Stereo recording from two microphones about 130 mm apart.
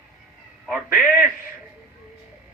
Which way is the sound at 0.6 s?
15° right (ahead or behind).